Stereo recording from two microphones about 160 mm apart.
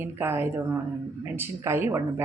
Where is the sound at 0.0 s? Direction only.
15° right (ahead or behind).